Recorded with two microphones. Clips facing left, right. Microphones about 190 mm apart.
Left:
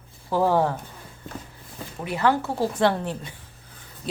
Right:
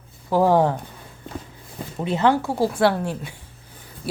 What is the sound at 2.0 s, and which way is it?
Speech, 25° right (ahead or behind).